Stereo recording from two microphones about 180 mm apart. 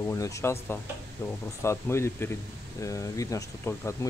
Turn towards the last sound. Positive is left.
turn(degrees=15)  # may be behind; listen again after turning